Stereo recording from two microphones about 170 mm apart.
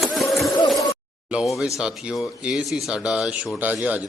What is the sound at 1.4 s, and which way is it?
Speech, 5° right (ahead or behind).